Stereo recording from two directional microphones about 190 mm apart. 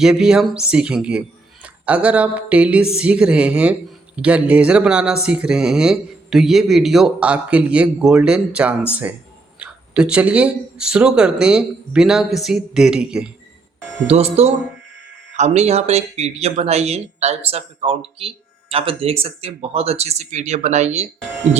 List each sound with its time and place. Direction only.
0.0 s speech: 5° right (ahead or behind)
14.1 s speech: 35° right (ahead or behind)